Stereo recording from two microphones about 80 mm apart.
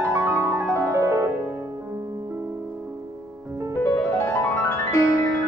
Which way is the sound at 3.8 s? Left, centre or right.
Left.